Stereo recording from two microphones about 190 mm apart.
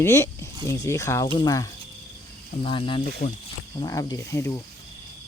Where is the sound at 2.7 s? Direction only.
25° left (ahead or behind).